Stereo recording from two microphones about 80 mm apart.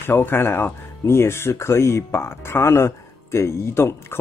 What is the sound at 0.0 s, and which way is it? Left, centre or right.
Speech, left.